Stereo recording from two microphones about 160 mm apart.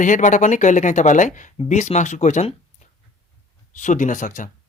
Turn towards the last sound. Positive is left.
turn(degrees=55)  # may be behind; listen again after turning